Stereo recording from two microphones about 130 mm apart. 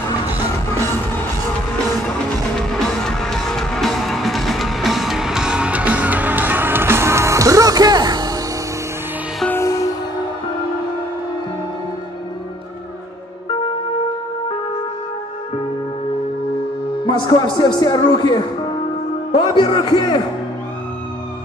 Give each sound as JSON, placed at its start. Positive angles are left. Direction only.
{"t": 3.0, "sound": "music", "side_deg": 5}
{"t": 9.5, "sound": "music", "side_deg": 20}
{"t": 17.0, "sound": "a man's voice", "side_deg": 35}